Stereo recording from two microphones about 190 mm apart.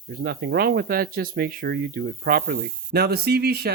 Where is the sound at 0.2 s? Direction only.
60° right (ahead or behind).